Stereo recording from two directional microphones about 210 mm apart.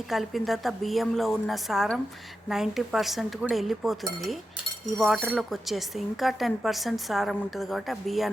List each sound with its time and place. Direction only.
0.1 s speech: centre (ahead or behind)
4.9 s speech: centre (ahead or behind)